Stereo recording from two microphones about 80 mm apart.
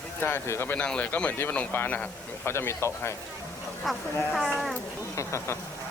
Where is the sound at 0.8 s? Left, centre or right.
Centre; by 3.2 s left.